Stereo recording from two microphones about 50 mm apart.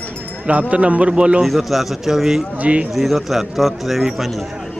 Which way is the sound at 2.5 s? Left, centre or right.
Right.